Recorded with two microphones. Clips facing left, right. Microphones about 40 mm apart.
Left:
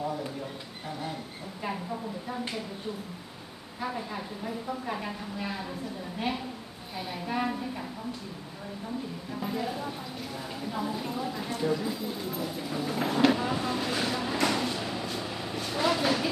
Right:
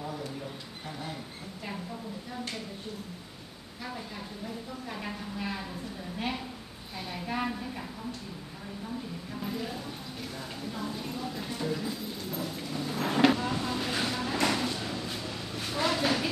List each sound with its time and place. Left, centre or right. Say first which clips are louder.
3.8 s speech: left 6 dB; centre
5.0 s a woman's voice: left 1 dB; centre
9.3 s speech: left 4 dB; centre
13.1 s vehicle: even; centre
13.4 s a sound: left 2 dB; centre
15.6 s vehicle: left 2 dB; centre